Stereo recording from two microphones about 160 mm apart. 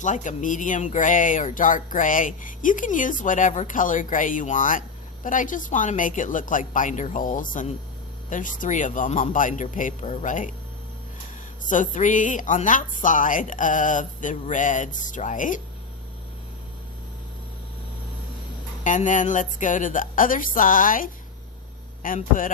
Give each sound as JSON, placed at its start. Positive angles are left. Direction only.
{"t": 0.0, "sound": "a woman's voice", "side_deg": 50}
{"t": 11.7, "sound": "a woman's voice", "side_deg": 50}
{"t": 18.8, "sound": "speech", "side_deg": 50}